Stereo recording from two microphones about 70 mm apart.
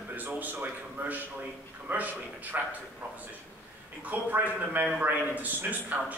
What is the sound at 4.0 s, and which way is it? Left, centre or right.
A man's voice, right.